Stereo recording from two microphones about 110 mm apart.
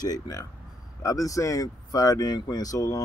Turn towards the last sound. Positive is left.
turn(degrees=30)  # may be behind; listen again after turning